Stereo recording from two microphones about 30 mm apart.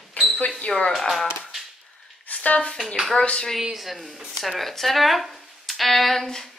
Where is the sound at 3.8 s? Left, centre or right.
Centre.